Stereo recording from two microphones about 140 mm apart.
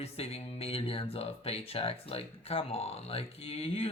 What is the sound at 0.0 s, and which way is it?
Speech, 45° left (ahead or behind).